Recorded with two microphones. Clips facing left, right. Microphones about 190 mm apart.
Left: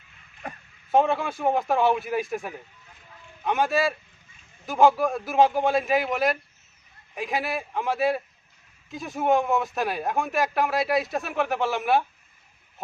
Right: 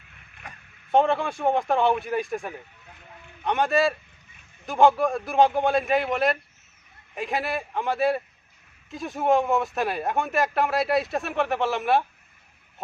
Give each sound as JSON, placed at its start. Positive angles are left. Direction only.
{"t": 0.9, "sound": "speech", "side_deg": 0}